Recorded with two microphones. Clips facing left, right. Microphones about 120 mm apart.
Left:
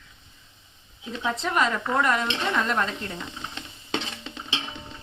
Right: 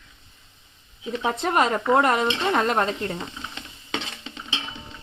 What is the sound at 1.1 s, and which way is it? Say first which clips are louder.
Speech: right 3 dB; 45° right (ahead or behind).